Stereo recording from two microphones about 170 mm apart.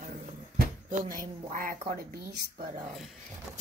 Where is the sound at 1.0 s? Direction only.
55° right (ahead or behind).